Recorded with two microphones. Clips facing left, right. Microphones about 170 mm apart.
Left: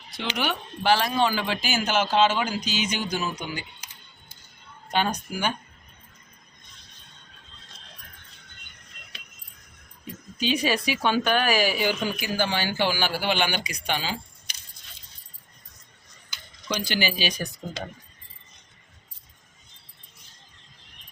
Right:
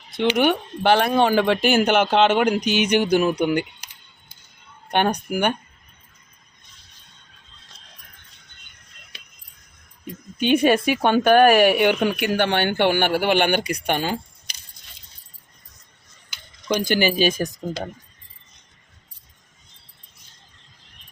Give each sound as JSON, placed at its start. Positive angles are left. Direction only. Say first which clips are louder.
{"t": 0.3, "sound": "speech", "louder": "right 9 dB", "side_deg": -55}
{"t": 4.9, "sound": "speech", "louder": "right 5 dB", "side_deg": -60}
{"t": 10.3, "sound": "speech", "louder": "right 8 dB", "side_deg": -55}
{"t": 16.6, "sound": "speech", "louder": "right 7 dB", "side_deg": -50}